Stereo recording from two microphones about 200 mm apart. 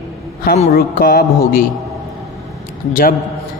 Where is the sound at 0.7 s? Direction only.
45° left (ahead or behind).